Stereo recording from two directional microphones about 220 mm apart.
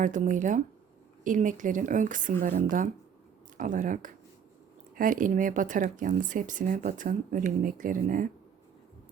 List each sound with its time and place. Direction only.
0.0 s speech: 35° right (ahead or behind)